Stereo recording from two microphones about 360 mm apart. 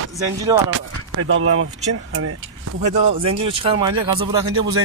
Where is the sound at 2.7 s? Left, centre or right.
Centre.